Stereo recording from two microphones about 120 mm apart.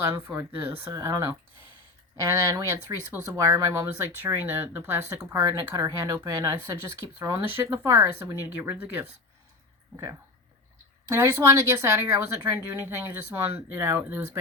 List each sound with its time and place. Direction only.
0.0 s speech: 20° right (ahead or behind)
0.9 s speech: 30° right (ahead or behind)
11.1 s speech: 20° right (ahead or behind)